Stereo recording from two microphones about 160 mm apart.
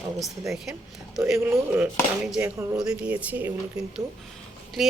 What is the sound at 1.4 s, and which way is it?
Speech, 15° right (ahead or behind).